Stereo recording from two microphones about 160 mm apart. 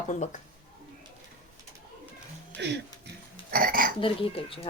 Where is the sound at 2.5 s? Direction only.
90° right.